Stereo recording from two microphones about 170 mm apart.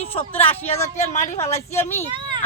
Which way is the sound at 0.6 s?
40° left (ahead or behind).